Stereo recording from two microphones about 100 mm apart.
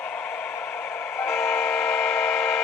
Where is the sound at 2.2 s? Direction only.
10° left (ahead or behind).